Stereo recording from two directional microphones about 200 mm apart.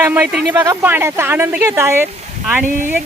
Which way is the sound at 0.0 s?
10° right (ahead or behind).